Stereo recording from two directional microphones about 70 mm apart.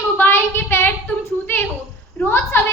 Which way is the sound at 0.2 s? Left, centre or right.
Left.